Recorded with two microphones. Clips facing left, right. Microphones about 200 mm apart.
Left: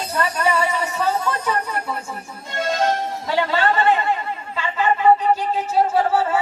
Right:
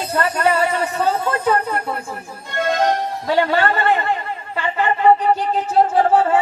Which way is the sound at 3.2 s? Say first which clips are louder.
Right 4 dB; 55° right (ahead or behind).